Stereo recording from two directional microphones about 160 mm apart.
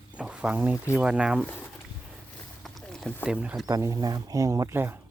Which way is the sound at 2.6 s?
5° left (ahead or behind).